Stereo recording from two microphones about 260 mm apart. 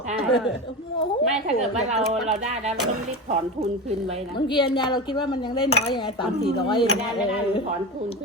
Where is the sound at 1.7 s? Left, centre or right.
Right.